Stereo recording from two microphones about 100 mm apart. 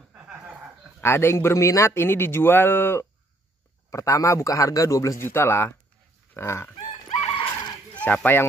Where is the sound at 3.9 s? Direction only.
35° left (ahead or behind).